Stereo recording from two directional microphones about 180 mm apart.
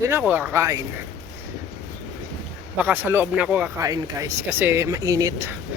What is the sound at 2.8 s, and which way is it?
Speech, 10° right (ahead or behind).